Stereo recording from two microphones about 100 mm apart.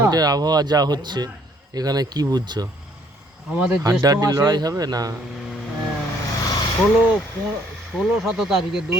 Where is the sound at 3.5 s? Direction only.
10° right (ahead or behind).